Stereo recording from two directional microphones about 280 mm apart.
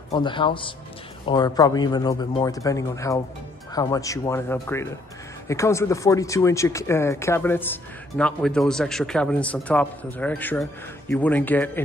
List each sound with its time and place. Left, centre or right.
0.1 s a man's voice: centre